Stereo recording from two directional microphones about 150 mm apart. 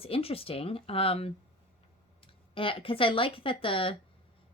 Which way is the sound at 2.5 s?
35° left (ahead or behind).